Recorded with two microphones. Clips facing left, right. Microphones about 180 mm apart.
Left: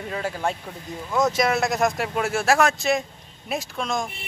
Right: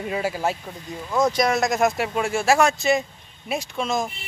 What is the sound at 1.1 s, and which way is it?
Speech, centre (ahead or behind).